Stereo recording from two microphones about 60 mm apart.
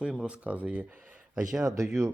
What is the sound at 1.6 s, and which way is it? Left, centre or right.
Speech, right.